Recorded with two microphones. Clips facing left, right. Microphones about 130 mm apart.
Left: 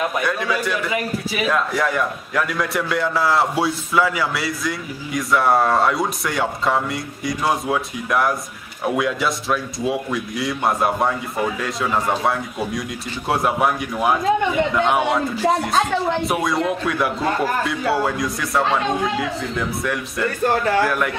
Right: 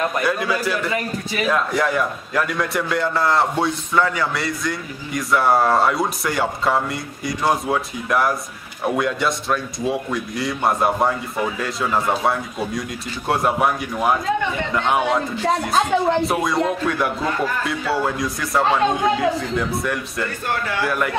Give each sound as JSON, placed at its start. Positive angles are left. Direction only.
{"t": 0.0, "sound": "a man's voice", "side_deg": 0}
{"t": 20.4, "sound": "a man's voice", "side_deg": 35}
{"t": 20.8, "sound": "a man's voice", "side_deg": 0}